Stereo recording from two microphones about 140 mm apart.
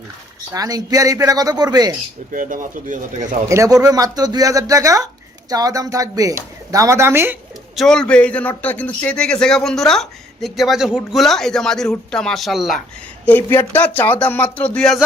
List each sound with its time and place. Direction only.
0.5 s speech: 25° right (ahead or behind)
2.3 s speech: 70° right (ahead or behind)
3.5 s speech: 25° right (ahead or behind)
7.8 s a man's voice: 5° left (ahead or behind)
13.2 s speech: 15° left (ahead or behind)